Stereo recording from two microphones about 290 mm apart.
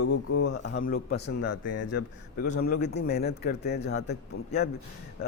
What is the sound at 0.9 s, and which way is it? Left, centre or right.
Speech, left.